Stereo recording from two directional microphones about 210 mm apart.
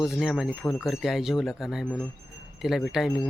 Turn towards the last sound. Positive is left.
turn(degrees=0)  # may be behind; listen again after turning